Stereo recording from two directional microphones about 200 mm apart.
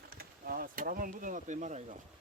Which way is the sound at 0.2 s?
45° right (ahead or behind).